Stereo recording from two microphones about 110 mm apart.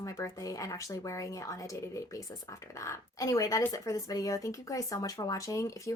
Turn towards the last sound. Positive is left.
turn(degrees=30)  # may be behind; listen again after turning